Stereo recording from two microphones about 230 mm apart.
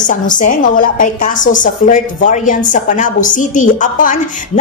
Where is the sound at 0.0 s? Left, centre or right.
Left.